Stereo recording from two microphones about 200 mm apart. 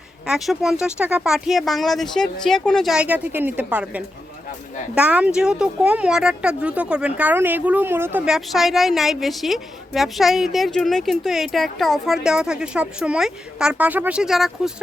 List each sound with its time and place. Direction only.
0.3 s speech: centre (ahead or behind)